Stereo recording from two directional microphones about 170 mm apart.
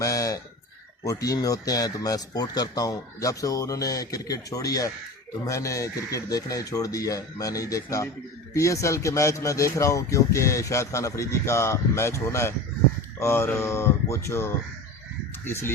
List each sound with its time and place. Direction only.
0.0 s chicken: 20° left (ahead or behind)
1.0 s speech: 20° left (ahead or behind)